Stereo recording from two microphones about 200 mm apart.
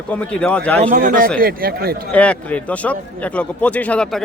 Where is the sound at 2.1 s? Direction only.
5° left (ahead or behind).